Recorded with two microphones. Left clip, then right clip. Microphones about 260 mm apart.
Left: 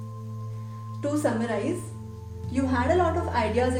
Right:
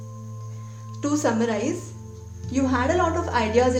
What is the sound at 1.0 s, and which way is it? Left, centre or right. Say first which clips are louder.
Speech: right 3 dB; right.